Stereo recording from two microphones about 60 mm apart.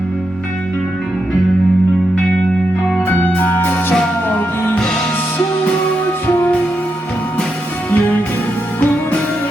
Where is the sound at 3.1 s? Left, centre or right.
Left.